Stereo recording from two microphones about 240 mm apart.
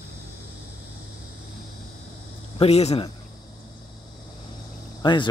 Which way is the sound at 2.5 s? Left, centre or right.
Left.